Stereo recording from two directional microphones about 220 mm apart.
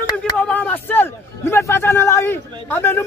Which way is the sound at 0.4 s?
5° left (ahead or behind).